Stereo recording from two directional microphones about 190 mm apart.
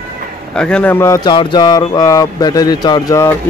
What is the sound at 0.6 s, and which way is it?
Speech, 5° left (ahead or behind).